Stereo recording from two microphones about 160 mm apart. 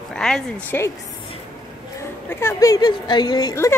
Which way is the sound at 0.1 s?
5° left (ahead or behind).